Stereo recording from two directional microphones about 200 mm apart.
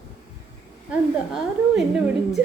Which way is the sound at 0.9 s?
5° right (ahead or behind).